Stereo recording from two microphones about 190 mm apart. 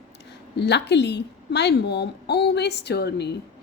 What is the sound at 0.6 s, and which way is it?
A woman's voice, 65° left (ahead or behind).